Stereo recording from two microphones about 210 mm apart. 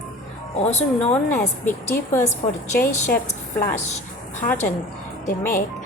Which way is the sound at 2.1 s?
10° left (ahead or behind).